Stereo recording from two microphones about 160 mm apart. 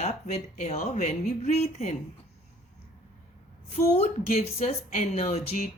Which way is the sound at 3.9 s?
40° left (ahead or behind).